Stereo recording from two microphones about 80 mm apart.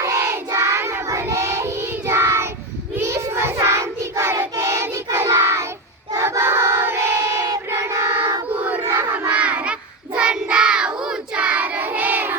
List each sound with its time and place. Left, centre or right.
0.0 s child singing: right
6.1 s battle cry: right
7.7 s child singing: right
8.4 s battle cry: centre
8.9 s crowd: right
9.3 s child singing: centre